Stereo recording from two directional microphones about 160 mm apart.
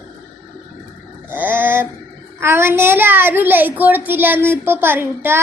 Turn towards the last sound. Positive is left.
turn(degrees=-15)  # may be behind; listen again after turning